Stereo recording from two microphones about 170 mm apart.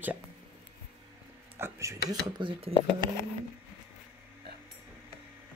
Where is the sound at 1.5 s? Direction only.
15° right (ahead or behind).